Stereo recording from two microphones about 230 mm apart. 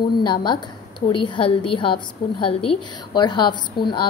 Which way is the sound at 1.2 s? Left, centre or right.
Centre.